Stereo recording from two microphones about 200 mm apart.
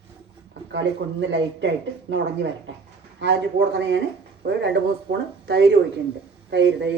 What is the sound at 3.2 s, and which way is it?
Speech, 65° right (ahead or behind).